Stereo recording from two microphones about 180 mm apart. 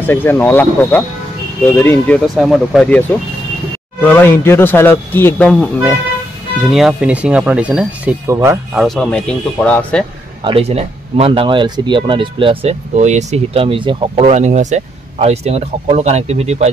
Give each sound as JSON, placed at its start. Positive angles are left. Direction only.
{"t": 0.0, "sound": "speech", "side_deg": 10}
{"t": 2.2, "sound": "speech", "side_deg": 0}
{"t": 6.7, "sound": "speech", "side_deg": -5}
{"t": 8.7, "sound": "speech", "side_deg": 0}
{"t": 10.4, "sound": "speech", "side_deg": -35}